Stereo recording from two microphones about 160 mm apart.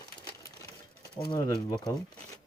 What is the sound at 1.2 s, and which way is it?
Speech, 30° left (ahead or behind).